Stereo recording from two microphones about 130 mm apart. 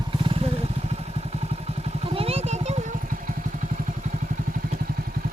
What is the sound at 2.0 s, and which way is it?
Vehicle, 50° right (ahead or behind).